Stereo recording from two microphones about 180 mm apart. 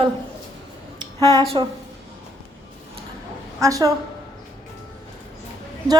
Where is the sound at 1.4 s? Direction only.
30° right (ahead or behind).